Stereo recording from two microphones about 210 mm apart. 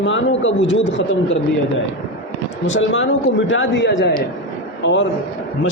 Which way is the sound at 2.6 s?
65° left (ahead or behind).